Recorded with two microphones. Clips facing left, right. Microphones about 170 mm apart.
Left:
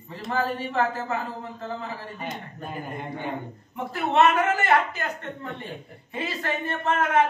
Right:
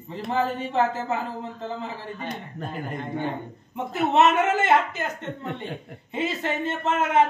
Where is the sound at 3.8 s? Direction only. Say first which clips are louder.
Right 1 dB; 20° right (ahead or behind).